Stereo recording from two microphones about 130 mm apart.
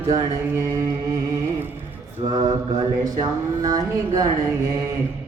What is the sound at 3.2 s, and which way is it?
Speech, 30° right (ahead or behind).